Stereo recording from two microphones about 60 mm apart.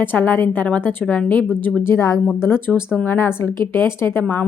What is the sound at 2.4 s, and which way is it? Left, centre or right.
A woman's voice, left.